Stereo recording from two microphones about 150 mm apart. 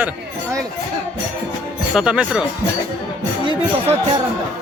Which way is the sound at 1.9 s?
5° right (ahead or behind).